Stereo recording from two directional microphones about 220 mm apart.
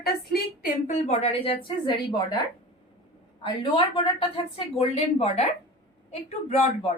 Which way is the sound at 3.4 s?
20° left (ahead or behind).